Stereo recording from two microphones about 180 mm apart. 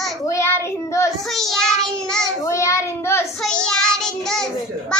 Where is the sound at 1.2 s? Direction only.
Centre (ahead or behind).